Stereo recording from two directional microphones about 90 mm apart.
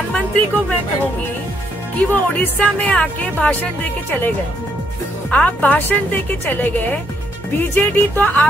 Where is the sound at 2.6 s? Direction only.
15° left (ahead or behind).